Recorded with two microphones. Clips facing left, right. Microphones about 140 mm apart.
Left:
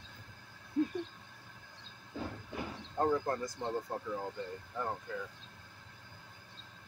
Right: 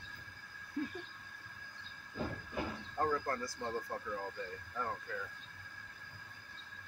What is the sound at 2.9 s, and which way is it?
Speech, 25° left (ahead or behind).